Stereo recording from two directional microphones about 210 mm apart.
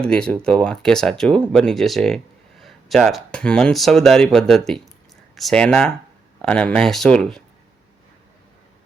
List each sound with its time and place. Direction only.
0.0 s speech: 5° left (ahead or behind)